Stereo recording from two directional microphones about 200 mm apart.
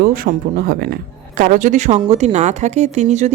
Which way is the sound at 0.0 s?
45° right (ahead or behind).